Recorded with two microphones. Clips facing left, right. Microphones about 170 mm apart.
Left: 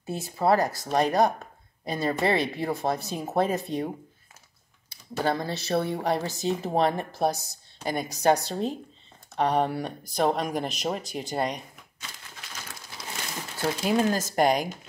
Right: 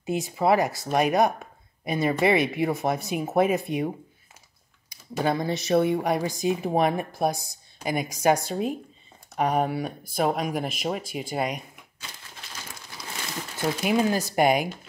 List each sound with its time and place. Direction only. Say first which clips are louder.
0.0 s speech: right 2 dB; 15° right (ahead or behind)
13.0 s crumpling: even; 25° left (ahead or behind)
13.8 s speech: right 1 dB; 10° right (ahead or behind)